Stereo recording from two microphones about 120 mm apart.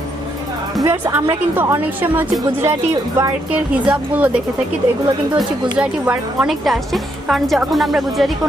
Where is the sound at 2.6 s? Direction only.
30° right (ahead or behind).